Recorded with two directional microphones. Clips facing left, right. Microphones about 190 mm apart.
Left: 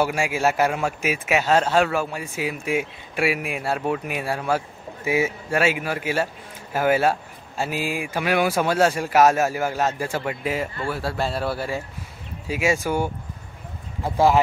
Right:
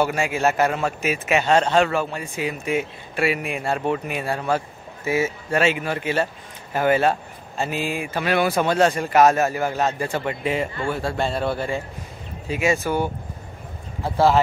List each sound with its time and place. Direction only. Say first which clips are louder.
0.0 s a man's voice: right 1 dB; 10° left (ahead or behind)